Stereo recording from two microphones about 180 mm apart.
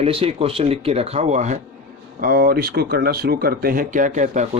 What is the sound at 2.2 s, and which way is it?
Speech, 55° right (ahead or behind).